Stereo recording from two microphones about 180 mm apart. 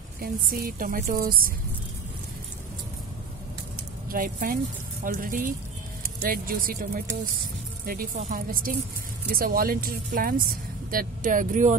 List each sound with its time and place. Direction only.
0.2 s speech: 55° right (ahead or behind)
4.1 s speech: 55° right (ahead or behind)